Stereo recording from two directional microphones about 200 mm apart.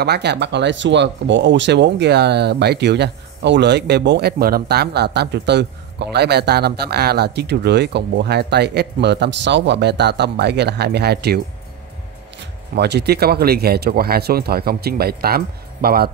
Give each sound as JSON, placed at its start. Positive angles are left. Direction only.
{"t": 0.0, "sound": "speech", "side_deg": -55}
{"t": 12.7, "sound": "speech", "side_deg": -55}